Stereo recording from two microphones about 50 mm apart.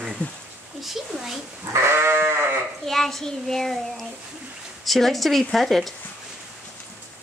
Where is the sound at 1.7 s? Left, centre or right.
Right.